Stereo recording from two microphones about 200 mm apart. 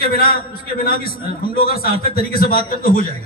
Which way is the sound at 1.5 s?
50° left (ahead or behind).